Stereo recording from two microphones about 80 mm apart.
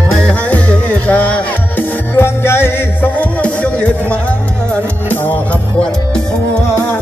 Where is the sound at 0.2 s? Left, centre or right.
Centre.